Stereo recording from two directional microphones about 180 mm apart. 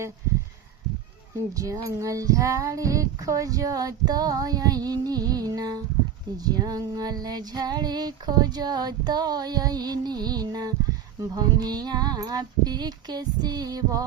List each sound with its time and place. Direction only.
1.5 s female singing: 15° right (ahead or behind)